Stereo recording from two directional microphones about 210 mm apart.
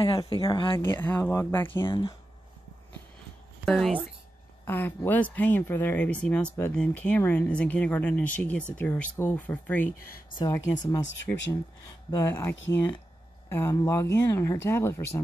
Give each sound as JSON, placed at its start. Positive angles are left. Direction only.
{"t": 0.0, "sound": "speech", "side_deg": 25}
{"t": 0.8, "sound": "speech", "side_deg": 10}
{"t": 1.9, "sound": "speech", "side_deg": 25}
{"t": 3.6, "sound": "speech", "side_deg": 0}
{"t": 10.3, "sound": "speech", "side_deg": 20}
{"t": 11.3, "sound": "speech", "side_deg": 5}